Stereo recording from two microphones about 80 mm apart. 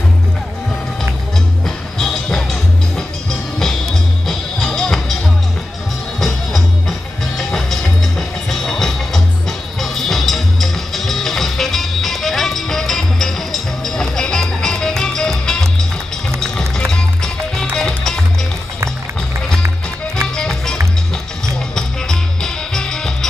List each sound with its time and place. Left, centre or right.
2.0 s music: centre
4.3 s music: centre
6.1 s music: centre
20.2 s music: centre
21.7 s music: centre